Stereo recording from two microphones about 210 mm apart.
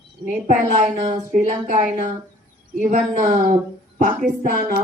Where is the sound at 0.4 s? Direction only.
35° right (ahead or behind).